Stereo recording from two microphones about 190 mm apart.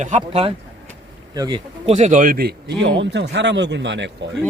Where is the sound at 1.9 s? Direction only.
40° right (ahead or behind); by 4.1 s 70° right (ahead or behind).